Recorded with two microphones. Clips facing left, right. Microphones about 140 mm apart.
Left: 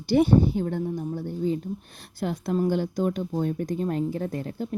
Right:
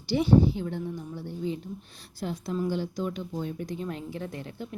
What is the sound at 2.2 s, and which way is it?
Speech, 55° left (ahead or behind).